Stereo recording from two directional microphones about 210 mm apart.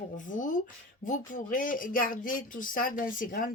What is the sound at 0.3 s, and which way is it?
Speech, 40° left (ahead or behind).